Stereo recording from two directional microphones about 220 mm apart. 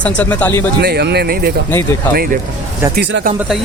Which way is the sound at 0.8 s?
45° right (ahead or behind).